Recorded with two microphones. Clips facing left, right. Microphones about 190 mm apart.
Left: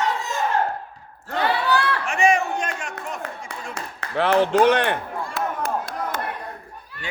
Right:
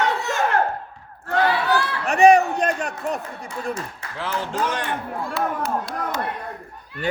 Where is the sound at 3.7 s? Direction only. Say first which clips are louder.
Left 6 dB; 65° left (ahead or behind).